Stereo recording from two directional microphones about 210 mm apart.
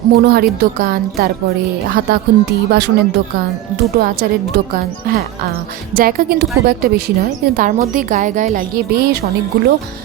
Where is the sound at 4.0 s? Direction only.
45° right (ahead or behind).